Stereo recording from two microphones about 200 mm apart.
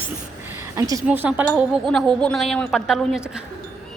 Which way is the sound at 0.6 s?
15° right (ahead or behind).